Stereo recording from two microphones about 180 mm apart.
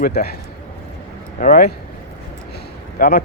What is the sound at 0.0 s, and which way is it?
Speech, 60° left (ahead or behind).